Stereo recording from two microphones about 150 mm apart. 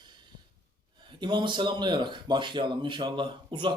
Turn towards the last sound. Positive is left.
turn(degrees=-30)  # may be behind; listen again after turning